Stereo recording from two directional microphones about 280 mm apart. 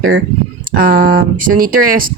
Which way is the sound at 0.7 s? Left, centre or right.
Right.